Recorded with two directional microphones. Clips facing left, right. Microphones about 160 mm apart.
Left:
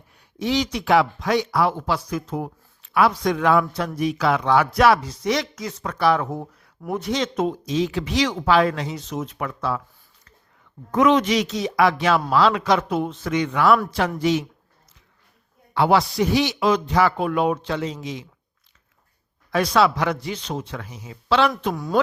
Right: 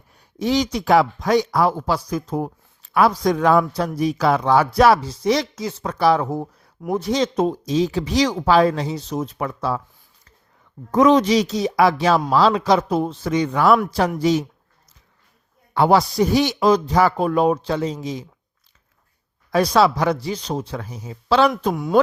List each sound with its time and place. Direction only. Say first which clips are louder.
0.2 s speech: right 3 dB; 40° right (ahead or behind)
10.9 s speech: right 3 dB; 35° right (ahead or behind)
15.7 s speech: right 2 dB; 40° right (ahead or behind)
19.5 s speech: right 2 dB; 35° right (ahead or behind)